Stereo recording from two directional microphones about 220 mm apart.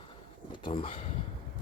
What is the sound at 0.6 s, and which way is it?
Speech, 25° left (ahead or behind).